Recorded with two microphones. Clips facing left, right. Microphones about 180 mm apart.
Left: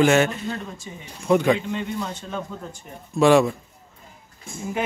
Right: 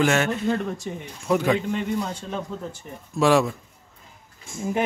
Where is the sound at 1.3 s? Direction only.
Centre (ahead or behind).